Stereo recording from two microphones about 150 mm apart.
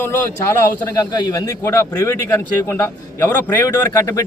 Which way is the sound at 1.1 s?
25° left (ahead or behind).